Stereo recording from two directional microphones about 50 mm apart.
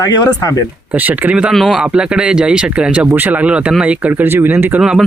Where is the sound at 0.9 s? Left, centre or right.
Right.